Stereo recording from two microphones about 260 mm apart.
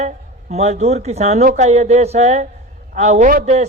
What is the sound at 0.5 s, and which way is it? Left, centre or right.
Speech, right.